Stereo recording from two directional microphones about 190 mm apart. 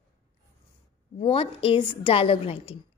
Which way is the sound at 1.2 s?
30° left (ahead or behind).